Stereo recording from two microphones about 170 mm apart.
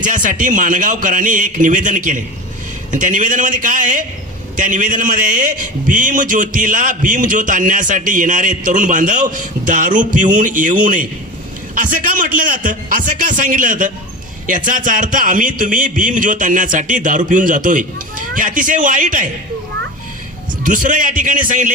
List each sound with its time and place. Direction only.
0.0 s a man's voice: 50° right (ahead or behind)
20.7 s a man's voice: 50° right (ahead or behind)